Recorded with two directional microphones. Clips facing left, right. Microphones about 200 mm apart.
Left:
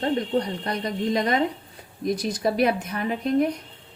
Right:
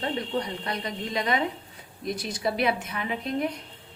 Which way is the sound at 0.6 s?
40° left (ahead or behind).